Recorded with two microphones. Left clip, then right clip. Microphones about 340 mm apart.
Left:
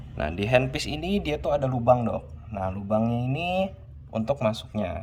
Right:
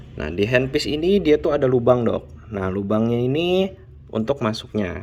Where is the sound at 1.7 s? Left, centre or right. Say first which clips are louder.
Right 5 dB; left.